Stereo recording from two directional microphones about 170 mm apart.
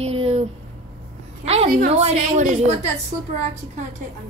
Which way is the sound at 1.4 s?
40° right (ahead or behind).